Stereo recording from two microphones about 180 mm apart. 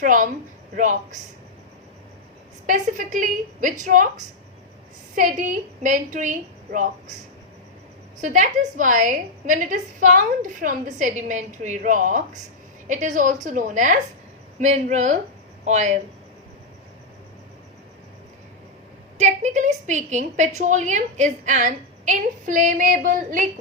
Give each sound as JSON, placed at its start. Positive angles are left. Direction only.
{"t": 0.0, "sound": "a woman's voice", "side_deg": -45}
{"t": 2.6, "sound": "a woman's voice", "side_deg": -45}
{"t": 5.1, "sound": "a woman's voice", "side_deg": -45}
{"t": 8.2, "sound": "a woman's voice", "side_deg": -45}
{"t": 19.2, "sound": "a woman's voice", "side_deg": -40}